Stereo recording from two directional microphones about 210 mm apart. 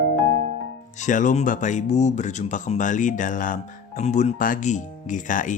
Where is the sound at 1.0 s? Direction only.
35° left (ahead or behind).